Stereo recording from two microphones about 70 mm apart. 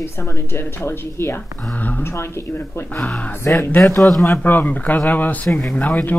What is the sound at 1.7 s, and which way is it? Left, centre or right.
Speech, left.